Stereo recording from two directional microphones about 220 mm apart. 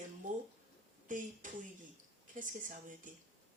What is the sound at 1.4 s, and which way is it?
Speech, 35° right (ahead or behind).